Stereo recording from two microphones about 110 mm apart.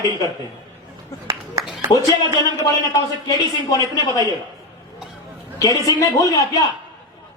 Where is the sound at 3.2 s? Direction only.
35° left (ahead or behind).